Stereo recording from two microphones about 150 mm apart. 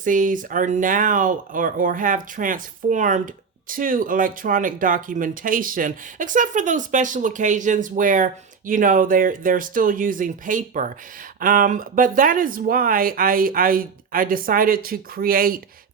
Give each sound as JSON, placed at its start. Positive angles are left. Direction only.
{"t": 0.0, "sound": "speech", "side_deg": -60}